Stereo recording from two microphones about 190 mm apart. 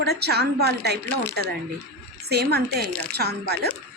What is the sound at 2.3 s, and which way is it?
A woman's voice, 60° right (ahead or behind).